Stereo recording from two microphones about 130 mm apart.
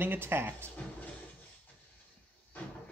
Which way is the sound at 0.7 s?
10° left (ahead or behind).